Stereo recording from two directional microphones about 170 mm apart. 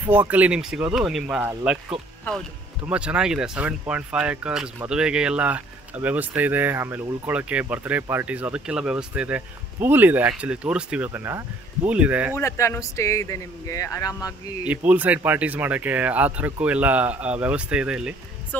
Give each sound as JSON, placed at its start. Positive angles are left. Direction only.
{"t": 0.1, "sound": "speech", "side_deg": -10}
{"t": 2.8, "sound": "speech", "side_deg": -5}
{"t": 12.4, "sound": "speech", "side_deg": 15}
{"t": 14.9, "sound": "speech", "side_deg": -10}
{"t": 18.5, "sound": "speech", "side_deg": 10}